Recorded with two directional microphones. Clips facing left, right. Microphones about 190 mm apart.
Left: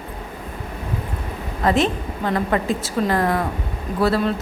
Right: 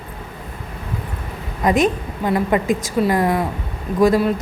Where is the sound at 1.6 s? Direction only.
15° right (ahead or behind).